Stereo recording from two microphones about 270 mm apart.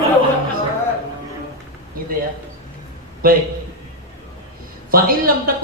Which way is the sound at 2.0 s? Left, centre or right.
Right.